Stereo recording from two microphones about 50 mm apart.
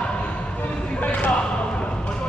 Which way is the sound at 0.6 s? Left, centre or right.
Left.